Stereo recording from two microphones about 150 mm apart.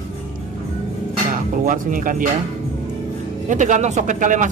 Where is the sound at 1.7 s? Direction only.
65° right (ahead or behind).